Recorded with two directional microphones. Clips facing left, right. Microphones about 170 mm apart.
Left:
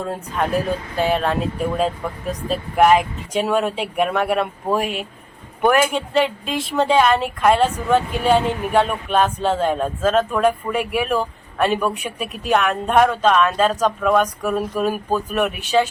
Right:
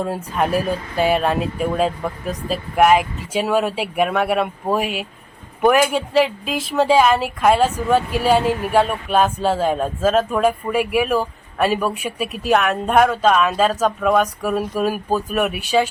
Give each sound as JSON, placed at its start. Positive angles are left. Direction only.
{"t": 0.0, "sound": "speech", "side_deg": -10}